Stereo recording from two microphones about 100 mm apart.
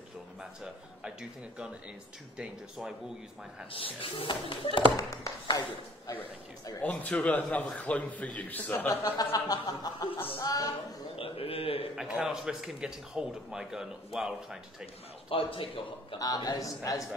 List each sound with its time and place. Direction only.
2.3 s speech: 10° right (ahead or behind)
3.7 s a man's voice: 65° left (ahead or behind)
4.9 s speech: 35° left (ahead or behind)
6.8 s a man's voice: 15° left (ahead or behind)
9.1 s speech: 40° left (ahead or behind)
11.1 s a sound: 70° left (ahead or behind)
11.9 s a man's voice: 5° right (ahead or behind)
15.2 s a man's voice: 65° left (ahead or behind)
16.2 s speech: 40° left (ahead or behind)